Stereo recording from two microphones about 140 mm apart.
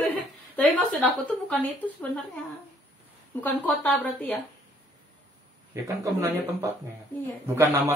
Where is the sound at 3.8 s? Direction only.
10° left (ahead or behind).